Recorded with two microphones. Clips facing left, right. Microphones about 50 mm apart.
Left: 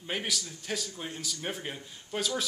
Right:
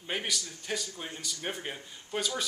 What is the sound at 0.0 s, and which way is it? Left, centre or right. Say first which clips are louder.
Speech: even; centre.